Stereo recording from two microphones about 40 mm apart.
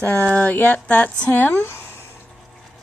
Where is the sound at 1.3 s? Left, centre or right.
Left.